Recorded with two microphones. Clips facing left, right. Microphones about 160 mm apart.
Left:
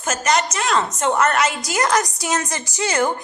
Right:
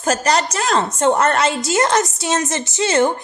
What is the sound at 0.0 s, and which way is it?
A woman's voice, 35° right (ahead or behind).